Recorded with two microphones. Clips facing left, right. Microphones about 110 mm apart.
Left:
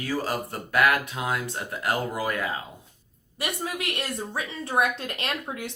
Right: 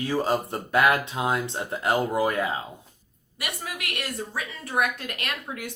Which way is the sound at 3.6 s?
25° left (ahead or behind).